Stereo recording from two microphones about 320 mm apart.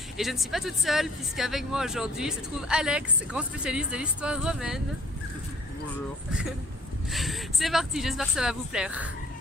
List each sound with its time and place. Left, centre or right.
0.2 s speech: centre
7.1 s speech: centre